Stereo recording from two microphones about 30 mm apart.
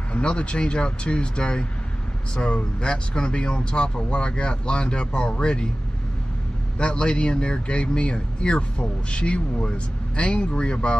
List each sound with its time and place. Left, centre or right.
0.1 s speech: left
7.0 s speech: left